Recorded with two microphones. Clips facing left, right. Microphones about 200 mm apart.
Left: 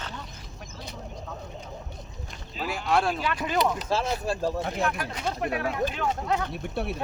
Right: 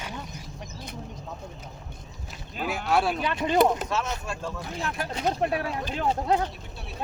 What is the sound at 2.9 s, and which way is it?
Speech, centre (ahead or behind).